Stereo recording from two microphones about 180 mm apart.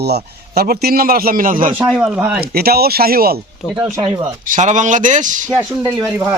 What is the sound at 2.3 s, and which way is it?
Speech, 60° right (ahead or behind).